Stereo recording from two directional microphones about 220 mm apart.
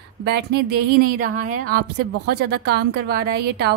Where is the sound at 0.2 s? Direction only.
50° right (ahead or behind).